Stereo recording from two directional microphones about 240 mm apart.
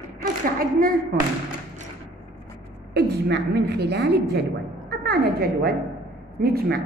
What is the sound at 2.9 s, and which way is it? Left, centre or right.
A woman's voice, right.